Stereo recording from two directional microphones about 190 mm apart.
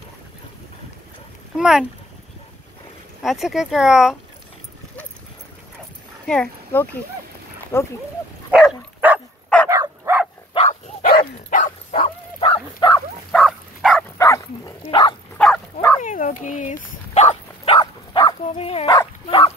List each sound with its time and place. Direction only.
1.6 s speech: 5° right (ahead or behind)
3.2 s speech: centre (ahead or behind)
6.2 s speech: 5° left (ahead or behind)
8.5 s dog: 5° right (ahead or behind)
9.7 s bow-wow: 15° right (ahead or behind)
10.5 s dog: 35° left (ahead or behind)
11.1 s dog: 45° left (ahead or behind)
12.4 s dog: 25° left (ahead or behind)
13.3 s dog: centre (ahead or behind)
14.1 s dog: 15° left (ahead or behind)
15.3 s dog: 5° left (ahead or behind)
16.0 s dog: 40° left (ahead or behind); by 18.3 s 25° left (ahead or behind)
18.4 s dog: 35° left (ahead or behind)